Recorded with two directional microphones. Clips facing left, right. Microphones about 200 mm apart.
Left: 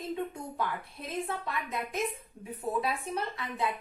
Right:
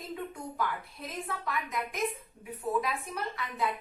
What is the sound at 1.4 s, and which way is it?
A woman's voice, 25° left (ahead or behind).